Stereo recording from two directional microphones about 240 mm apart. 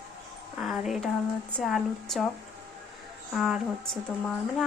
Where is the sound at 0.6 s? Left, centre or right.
Centre.